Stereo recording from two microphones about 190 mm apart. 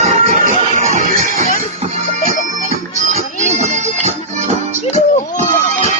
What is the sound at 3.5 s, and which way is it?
Music, 35° right (ahead or behind).